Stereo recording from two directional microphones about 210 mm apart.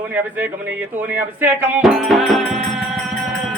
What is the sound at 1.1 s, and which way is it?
Speech, 10° right (ahead or behind).